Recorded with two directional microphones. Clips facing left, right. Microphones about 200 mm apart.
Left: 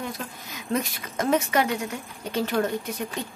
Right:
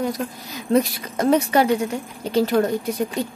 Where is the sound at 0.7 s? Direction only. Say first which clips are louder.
Right 8 dB; 35° right (ahead or behind).